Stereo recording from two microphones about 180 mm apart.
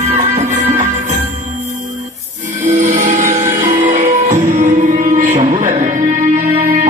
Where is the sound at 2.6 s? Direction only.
40° right (ahead or behind).